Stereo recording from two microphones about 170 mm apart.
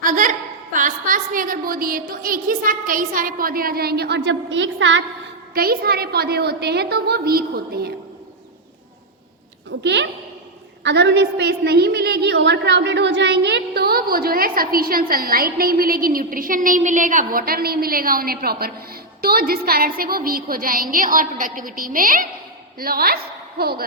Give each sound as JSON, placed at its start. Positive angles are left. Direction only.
{"t": 0.0, "sound": "a woman's voice", "side_deg": -50}
{"t": 5.5, "sound": "a child's voice", "side_deg": -60}
{"t": 9.8, "sound": "a child's voice", "side_deg": -90}